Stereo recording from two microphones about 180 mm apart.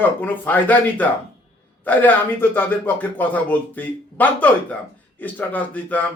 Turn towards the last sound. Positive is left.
turn(degrees=10)  # may be behind; listen again after turning